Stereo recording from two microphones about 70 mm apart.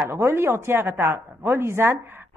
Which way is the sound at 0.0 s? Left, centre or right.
Right.